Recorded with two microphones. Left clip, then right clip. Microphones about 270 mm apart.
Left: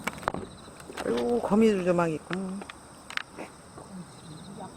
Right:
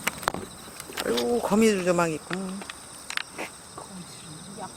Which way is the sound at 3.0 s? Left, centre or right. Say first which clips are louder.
Right 3 dB; centre.